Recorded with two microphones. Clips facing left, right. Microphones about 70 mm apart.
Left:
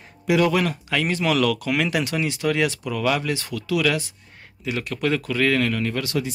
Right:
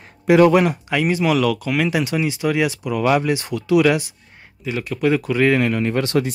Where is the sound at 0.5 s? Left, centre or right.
Right.